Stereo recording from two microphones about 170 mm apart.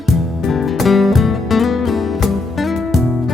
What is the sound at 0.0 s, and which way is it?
Music, centre (ahead or behind).